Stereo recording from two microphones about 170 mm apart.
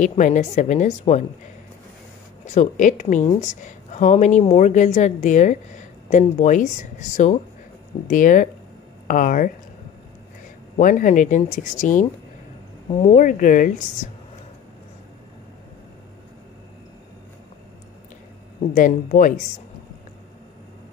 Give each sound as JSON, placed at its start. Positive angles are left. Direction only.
{"t": 0.0, "sound": "a woman's voice", "side_deg": 45}
{"t": 2.4, "sound": "a woman's voice", "side_deg": 45}
{"t": 10.8, "sound": "a woman's voice", "side_deg": 50}
{"t": 18.8, "sound": "a woman's voice", "side_deg": 50}